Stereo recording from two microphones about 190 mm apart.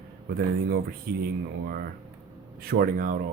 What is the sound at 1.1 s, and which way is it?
Speech, 50° right (ahead or behind).